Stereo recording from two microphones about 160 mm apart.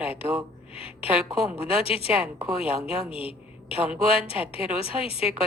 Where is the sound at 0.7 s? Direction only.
35° left (ahead or behind).